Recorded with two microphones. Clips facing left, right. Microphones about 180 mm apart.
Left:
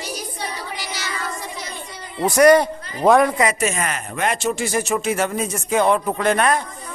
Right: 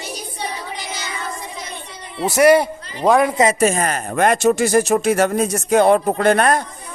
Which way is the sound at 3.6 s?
40° right (ahead or behind).